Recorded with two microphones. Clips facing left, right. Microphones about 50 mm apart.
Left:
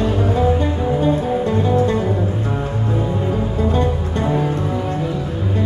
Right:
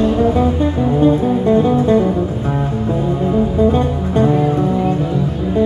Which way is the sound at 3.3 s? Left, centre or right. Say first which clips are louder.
Right 6 dB; centre.